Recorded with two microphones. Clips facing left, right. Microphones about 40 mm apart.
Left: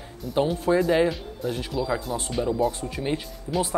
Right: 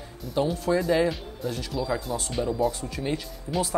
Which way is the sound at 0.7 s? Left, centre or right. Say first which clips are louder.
Left 2 dB; centre.